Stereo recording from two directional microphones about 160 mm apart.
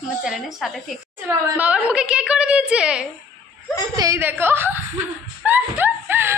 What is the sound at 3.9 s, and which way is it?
Speech, 15° right (ahead or behind).